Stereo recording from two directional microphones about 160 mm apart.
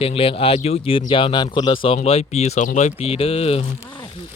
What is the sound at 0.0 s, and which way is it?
Speech, 35° left (ahead or behind).